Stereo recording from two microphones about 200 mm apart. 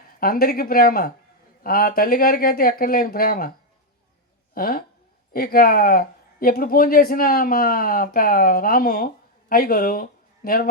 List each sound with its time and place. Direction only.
0.0 s a man's voice: 45° left (ahead or behind)
4.5 s a man's voice: 45° left (ahead or behind)